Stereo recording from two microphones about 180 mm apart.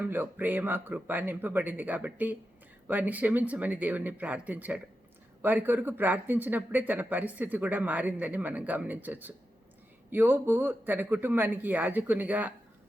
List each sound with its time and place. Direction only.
0.0 s speech: 10° right (ahead or behind)